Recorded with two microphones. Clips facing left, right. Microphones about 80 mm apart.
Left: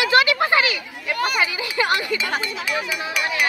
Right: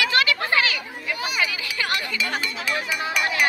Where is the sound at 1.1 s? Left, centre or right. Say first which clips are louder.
Left 7 dB; left.